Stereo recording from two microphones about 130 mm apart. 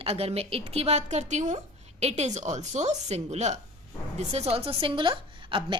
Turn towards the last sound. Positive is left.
turn(degrees=-40)  # may be behind; listen again after turning